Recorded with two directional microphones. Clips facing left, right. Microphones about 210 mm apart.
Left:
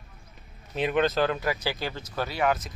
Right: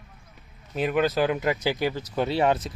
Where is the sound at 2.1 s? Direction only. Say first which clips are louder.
Right 3 dB; 30° right (ahead or behind).